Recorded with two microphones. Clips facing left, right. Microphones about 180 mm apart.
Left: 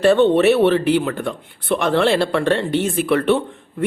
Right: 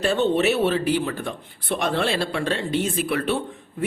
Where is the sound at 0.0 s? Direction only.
60° left (ahead or behind).